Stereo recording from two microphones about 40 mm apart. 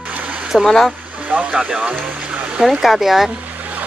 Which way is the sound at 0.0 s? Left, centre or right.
Right.